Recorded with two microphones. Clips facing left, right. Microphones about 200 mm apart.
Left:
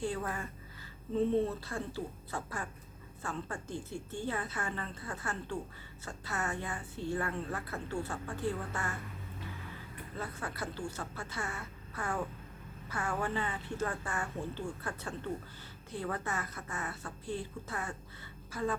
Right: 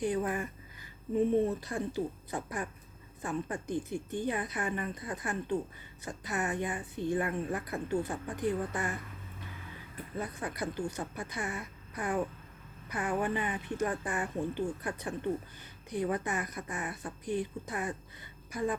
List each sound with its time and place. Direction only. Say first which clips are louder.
0.0 s a woman's voice: right 5 dB; 15° right (ahead or behind)
10.2 s a woman's voice: right 4 dB; 15° right (ahead or behind)